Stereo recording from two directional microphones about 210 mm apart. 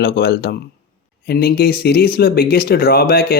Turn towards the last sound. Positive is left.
turn(degrees=45)  # may be behind; listen again after turning